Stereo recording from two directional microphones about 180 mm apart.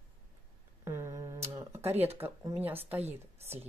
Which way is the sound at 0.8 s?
15° right (ahead or behind).